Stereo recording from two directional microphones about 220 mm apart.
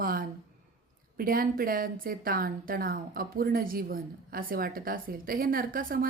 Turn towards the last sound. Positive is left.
turn(degrees=-40)  # may be behind; listen again after turning